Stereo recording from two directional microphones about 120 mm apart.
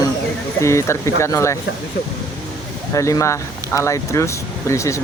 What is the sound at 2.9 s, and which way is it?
Speech, 25° left (ahead or behind).